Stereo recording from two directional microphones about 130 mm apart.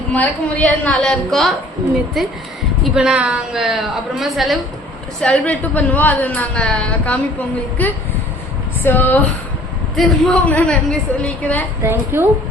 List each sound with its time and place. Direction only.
0.1 s a woman's voice: 10° left (ahead or behind)
9.9 s a woman's voice: 5° left (ahead or behind)
11.8 s a woman's voice: 20° right (ahead or behind)